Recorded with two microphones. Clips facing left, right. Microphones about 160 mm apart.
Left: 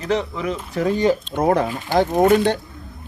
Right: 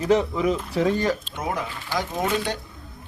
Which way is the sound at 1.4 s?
55° left (ahead or behind).